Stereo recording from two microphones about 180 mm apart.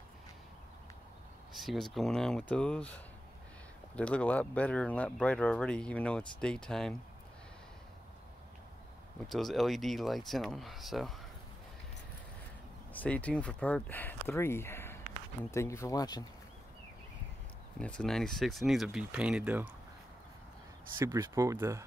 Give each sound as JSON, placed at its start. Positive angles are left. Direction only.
{"t": 1.5, "sound": "speech", "side_deg": 0}
{"t": 9.3, "sound": "speech", "side_deg": 0}
{"t": 12.9, "sound": "speech", "side_deg": 10}
{"t": 17.7, "sound": "speech", "side_deg": 5}
{"t": 21.0, "sound": "speech", "side_deg": -15}